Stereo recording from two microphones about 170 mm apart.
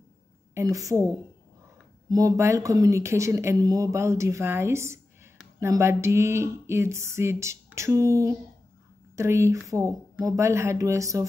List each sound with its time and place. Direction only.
0.6 s a woman's voice: 20° right (ahead or behind)
2.0 s speech: 20° right (ahead or behind)